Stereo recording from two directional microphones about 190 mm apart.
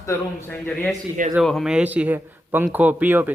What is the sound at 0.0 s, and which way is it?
A man's voice, 10° left (ahead or behind).